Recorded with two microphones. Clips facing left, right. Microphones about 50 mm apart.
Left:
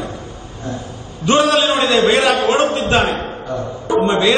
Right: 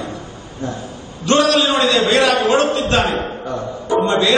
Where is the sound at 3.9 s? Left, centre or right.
Centre.